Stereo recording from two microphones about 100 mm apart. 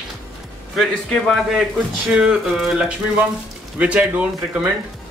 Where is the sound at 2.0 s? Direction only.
10° right (ahead or behind).